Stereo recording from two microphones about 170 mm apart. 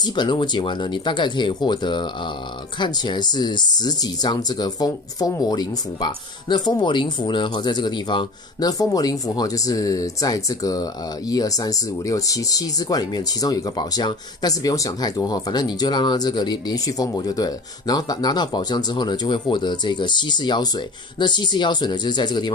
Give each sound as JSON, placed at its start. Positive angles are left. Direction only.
{"t": 0.0, "sound": "speech", "side_deg": 25}